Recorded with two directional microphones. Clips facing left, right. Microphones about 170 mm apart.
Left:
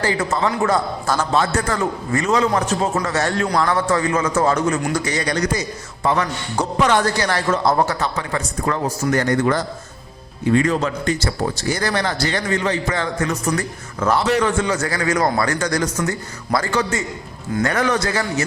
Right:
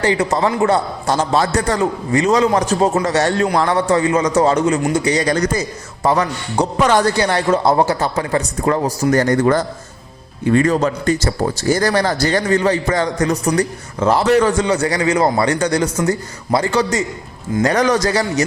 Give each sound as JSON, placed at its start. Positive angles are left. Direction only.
{"t": 0.0, "sound": "a man's voice", "side_deg": -30}